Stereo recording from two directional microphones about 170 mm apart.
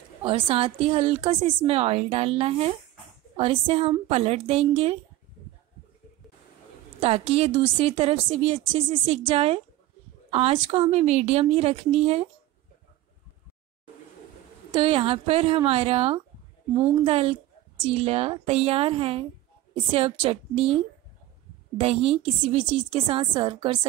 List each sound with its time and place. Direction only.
0.2 s a woman's voice: 30° right (ahead or behind)
7.0 s a woman's voice: 35° right (ahead or behind)
14.7 s a woman's voice: 30° right (ahead or behind)